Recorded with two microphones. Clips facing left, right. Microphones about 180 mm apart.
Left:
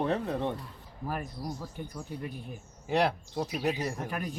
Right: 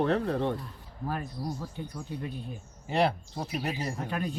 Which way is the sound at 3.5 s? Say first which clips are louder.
Left 1 dB; centre (ahead or behind).